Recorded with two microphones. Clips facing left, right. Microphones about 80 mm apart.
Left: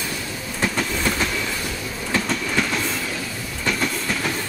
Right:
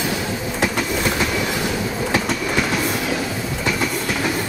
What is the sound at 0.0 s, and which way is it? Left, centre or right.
Train, right.